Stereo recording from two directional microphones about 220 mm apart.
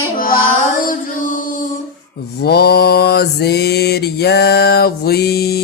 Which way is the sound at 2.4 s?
45° left (ahead or behind).